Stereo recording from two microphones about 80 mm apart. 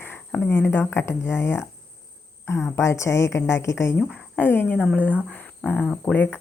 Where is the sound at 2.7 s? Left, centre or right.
Left.